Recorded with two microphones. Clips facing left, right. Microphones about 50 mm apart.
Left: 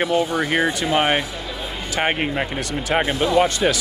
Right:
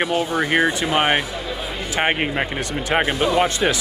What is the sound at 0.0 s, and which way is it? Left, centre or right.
Speech, centre.